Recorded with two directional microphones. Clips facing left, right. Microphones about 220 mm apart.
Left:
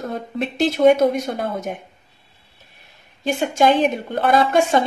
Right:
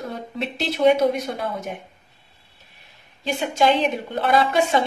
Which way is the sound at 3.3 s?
50° left (ahead or behind).